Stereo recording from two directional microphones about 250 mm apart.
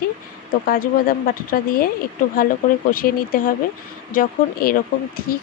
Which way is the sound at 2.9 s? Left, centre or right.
Left.